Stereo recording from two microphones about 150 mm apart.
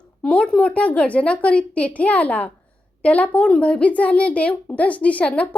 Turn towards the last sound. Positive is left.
turn(degrees=10)  # may be behind; listen again after turning